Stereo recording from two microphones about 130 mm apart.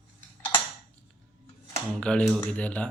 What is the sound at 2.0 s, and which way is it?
Speech, 5° left (ahead or behind).